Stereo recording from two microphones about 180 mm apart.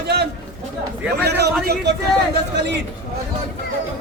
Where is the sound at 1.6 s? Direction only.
60° right (ahead or behind).